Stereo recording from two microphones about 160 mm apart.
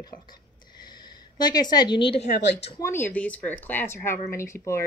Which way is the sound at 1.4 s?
25° left (ahead or behind).